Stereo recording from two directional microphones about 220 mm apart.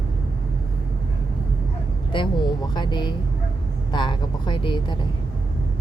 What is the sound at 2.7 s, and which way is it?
Speech, 20° left (ahead or behind).